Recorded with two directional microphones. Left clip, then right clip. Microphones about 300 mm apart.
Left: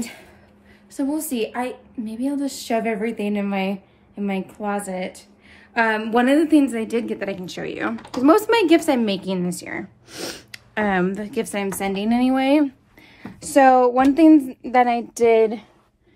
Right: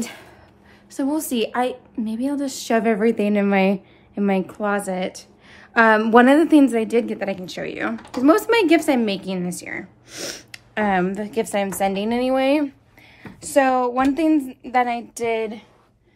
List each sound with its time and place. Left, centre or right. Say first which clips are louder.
1.0 s a woman's voice: right 2 dB; centre